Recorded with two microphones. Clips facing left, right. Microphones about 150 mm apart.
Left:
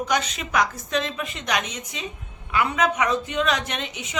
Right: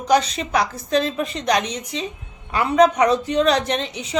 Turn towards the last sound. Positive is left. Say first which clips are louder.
# right 7 dB
turn(degrees=-35)  # may be behind; listen again after turning